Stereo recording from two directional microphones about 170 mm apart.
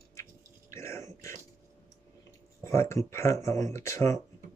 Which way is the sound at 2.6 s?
15° left (ahead or behind).